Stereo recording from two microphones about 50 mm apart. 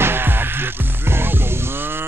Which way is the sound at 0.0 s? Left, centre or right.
Right.